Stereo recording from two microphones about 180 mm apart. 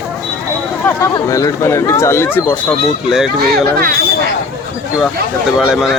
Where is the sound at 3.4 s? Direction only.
55° right (ahead or behind).